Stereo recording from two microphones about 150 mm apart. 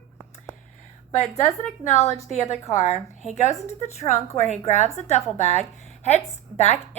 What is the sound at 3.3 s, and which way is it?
A woman's voice, 50° left (ahead or behind).